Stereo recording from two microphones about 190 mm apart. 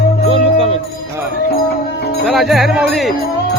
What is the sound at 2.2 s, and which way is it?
Speech, centre (ahead or behind).